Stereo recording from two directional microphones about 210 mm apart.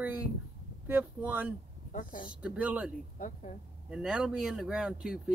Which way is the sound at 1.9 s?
40° left (ahead or behind).